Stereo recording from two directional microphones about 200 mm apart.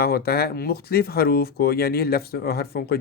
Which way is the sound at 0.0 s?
50° left (ahead or behind).